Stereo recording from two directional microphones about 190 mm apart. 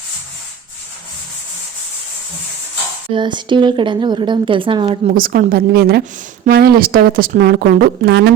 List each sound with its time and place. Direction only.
3.1 s a woman's voice: 25° right (ahead or behind); by 8.3 s 65° right (ahead or behind)